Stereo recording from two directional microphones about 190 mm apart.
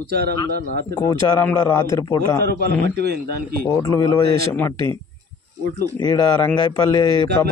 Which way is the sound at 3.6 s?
15° left (ahead or behind).